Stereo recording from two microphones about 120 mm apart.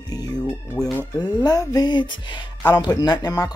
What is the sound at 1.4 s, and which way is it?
Speech, 30° left (ahead or behind).